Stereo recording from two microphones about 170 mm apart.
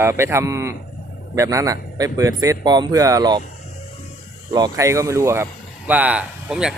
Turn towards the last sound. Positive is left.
turn(degrees=-5)  # may be behind; listen again after turning